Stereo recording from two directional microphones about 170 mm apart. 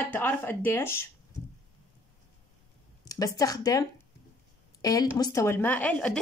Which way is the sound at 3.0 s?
20° left (ahead or behind).